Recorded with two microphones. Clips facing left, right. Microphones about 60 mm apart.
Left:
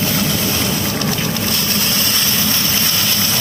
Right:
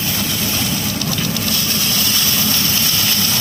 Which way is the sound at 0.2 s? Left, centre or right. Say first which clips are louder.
Left 3 dB; left.